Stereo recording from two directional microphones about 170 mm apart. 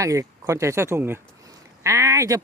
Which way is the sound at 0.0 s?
20° right (ahead or behind).